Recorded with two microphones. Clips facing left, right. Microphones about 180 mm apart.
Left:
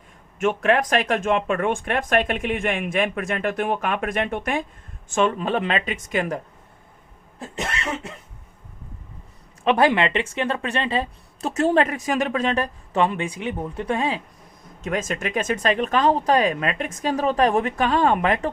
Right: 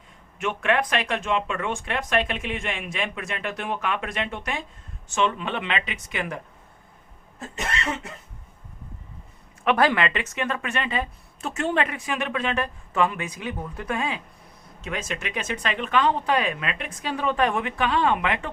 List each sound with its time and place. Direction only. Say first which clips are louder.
0.3 s a woman's voice: left 4 dB; 40° left (ahead or behind)
9.6 s a woman's voice: left 3 dB; 25° left (ahead or behind)
14.8 s a woman's voice: left 6 dB; 45° left (ahead or behind)